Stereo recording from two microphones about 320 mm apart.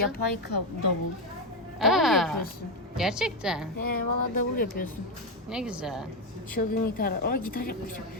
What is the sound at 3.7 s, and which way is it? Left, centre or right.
A woman's voice, left.